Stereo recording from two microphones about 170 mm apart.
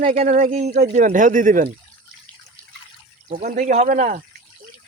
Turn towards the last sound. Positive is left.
turn(degrees=-50)  # may be behind; listen again after turning